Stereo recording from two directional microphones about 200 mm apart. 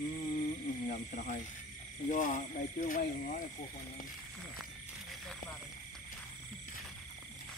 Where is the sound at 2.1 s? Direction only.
40° left (ahead or behind).